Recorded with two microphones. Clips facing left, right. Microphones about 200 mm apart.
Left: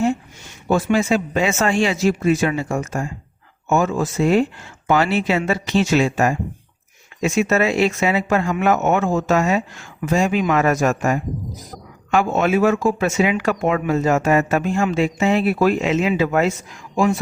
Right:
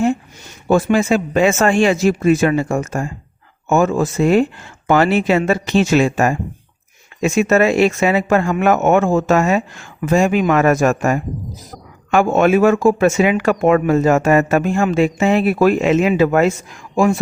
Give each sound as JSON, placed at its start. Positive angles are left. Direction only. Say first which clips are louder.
{"t": 0.7, "sound": "speech", "louder": "right 3 dB", "side_deg": -50}